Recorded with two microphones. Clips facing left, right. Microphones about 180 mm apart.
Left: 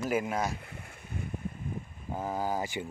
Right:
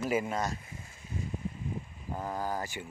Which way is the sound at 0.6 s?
65° left (ahead or behind).